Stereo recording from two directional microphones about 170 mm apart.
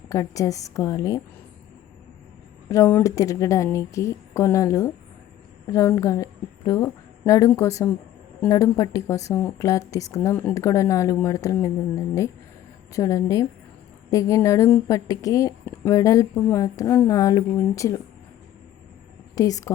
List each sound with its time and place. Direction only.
0.1 s a woman's voice: 20° left (ahead or behind)
2.6 s a woman's voice: 15° left (ahead or behind)
19.4 s a woman's voice: 20° left (ahead or behind)